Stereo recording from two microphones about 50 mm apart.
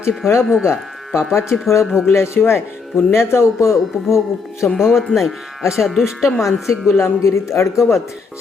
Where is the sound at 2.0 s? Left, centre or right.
Left.